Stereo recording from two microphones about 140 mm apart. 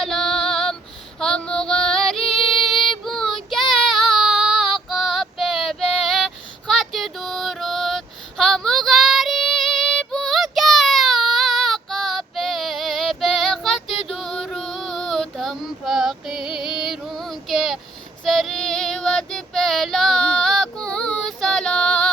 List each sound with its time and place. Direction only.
0.0 s female singing: centre (ahead or behind)
2.2 s music: 45° left (ahead or behind)
3.0 s child singing: centre (ahead or behind)
18.3 s female singing: centre (ahead or behind)